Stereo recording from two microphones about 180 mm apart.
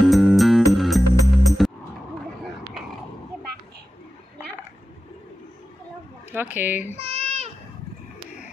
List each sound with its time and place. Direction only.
0.0 s music: centre (ahead or behind)
6.3 s speech: 10° right (ahead or behind)
7.0 s babbling: 35° right (ahead or behind)